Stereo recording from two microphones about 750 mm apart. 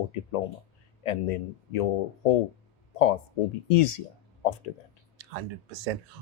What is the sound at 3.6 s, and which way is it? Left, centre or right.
Speech, left.